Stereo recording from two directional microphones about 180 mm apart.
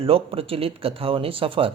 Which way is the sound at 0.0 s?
30° right (ahead or behind).